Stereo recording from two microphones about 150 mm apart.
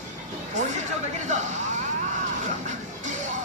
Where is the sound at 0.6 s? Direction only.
55° right (ahead or behind).